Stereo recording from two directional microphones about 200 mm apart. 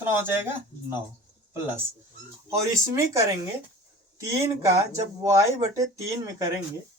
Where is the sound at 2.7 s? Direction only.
15° right (ahead or behind).